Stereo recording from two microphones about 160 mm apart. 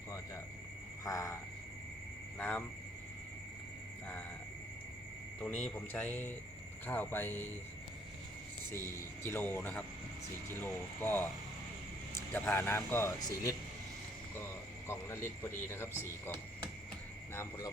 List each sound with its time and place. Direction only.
1.0 s speech: 20° left (ahead or behind)
2.4 s speech: 10° left (ahead or behind)
5.4 s speech: 5° left (ahead or behind)
8.9 s speech: 15° left (ahead or behind)
14.8 s speech: 15° left (ahead or behind)